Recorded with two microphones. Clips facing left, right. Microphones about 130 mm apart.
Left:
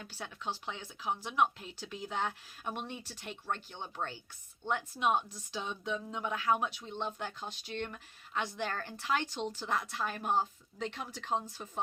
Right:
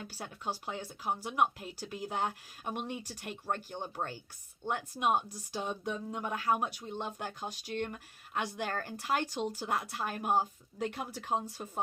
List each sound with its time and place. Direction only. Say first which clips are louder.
0.0 s speech: right 1 dB; 40° right (ahead or behind)
9.2 s speech: right 2 dB; 10° right (ahead or behind)
9.7 s speech: even; 45° right (ahead or behind)